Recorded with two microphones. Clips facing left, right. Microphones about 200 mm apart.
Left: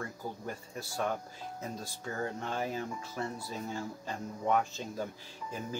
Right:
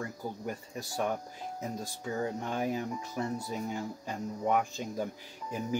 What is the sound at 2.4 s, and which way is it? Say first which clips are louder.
Speech: right 3 dB; 15° right (ahead or behind).